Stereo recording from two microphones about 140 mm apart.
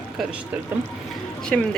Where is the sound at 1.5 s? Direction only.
5° left (ahead or behind).